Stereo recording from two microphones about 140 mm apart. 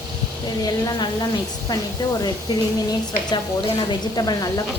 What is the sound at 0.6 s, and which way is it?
A woman's voice, 30° left (ahead or behind).